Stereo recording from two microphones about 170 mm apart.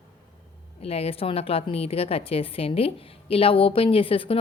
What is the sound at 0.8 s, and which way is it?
A woman's voice, 35° left (ahead or behind).